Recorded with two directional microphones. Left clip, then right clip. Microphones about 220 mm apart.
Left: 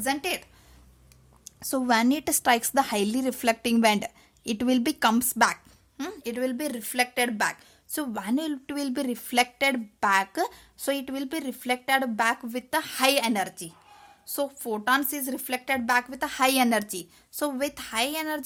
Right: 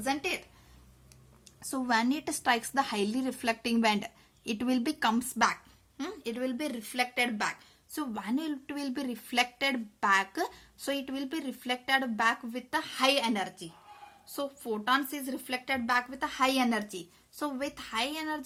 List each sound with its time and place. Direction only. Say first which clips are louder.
0.0 s speech: left 4 dB; 45° left (ahead or behind)
1.5 s a woman's voice: left 6 dB; 35° left (ahead or behind)